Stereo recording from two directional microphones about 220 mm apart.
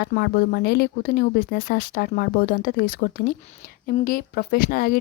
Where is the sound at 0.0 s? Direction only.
45° left (ahead or behind).